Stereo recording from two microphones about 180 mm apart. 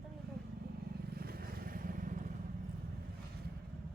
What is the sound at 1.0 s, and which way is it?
Vehicle, 55° right (ahead or behind).